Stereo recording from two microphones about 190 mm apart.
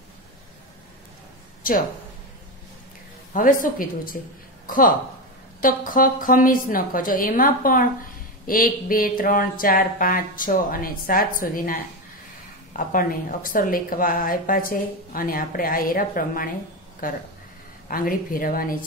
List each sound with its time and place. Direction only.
1.6 s a woman's voice: 45° left (ahead or behind)
3.3 s a woman's voice: 45° left (ahead or behind)